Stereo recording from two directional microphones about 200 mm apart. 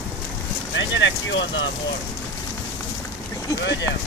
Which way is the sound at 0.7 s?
65° left (ahead or behind).